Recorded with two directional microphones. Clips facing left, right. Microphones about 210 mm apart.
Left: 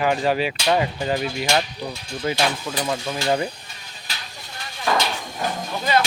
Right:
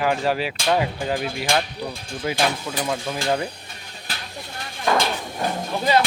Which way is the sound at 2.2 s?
10° right (ahead or behind).